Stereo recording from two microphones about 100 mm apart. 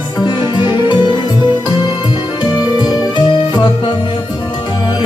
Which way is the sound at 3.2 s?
50° left (ahead or behind).